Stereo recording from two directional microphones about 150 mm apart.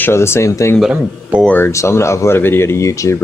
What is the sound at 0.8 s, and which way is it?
Speech, 5° right (ahead or behind).